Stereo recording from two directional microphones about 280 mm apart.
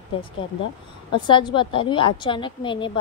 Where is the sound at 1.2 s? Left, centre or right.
Centre.